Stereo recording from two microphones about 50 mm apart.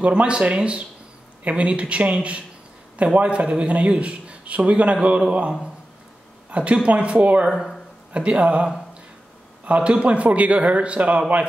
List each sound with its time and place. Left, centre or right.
0.0 s a man's voice: right
6.5 s a man's voice: right
7.4 s speech: centre
8.1 s a man's voice: right
9.7 s a man's voice: right